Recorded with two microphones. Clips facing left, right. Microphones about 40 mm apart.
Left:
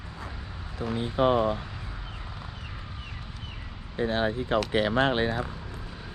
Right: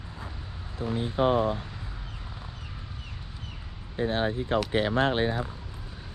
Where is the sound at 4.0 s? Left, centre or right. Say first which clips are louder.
Left 1 dB; left.